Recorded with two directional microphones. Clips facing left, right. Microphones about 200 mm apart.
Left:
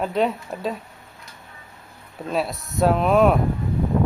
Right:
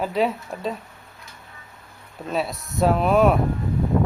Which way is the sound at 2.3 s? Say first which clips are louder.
Left 1 dB; centre (ahead or behind).